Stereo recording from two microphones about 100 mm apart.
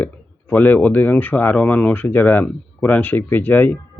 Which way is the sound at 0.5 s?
20° left (ahead or behind).